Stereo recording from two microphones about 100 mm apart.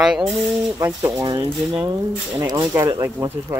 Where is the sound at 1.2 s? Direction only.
45° right (ahead or behind).